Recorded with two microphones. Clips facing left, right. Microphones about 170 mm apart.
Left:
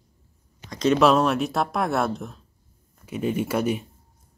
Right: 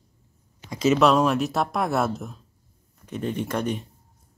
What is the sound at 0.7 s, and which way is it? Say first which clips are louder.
Speech: even; 5° right (ahead or behind).